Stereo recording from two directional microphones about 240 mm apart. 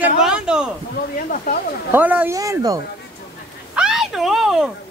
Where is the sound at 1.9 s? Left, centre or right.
Centre.